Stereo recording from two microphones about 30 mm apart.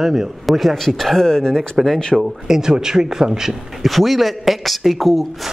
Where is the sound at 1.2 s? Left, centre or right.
Centre.